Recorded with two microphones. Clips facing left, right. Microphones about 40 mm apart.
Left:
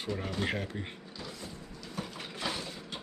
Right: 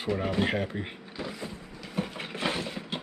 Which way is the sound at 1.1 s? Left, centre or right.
Right.